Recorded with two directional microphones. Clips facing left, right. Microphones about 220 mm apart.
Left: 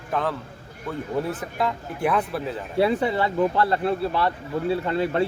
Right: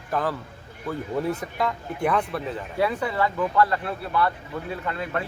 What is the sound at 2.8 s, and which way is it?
Speech, 30° left (ahead or behind).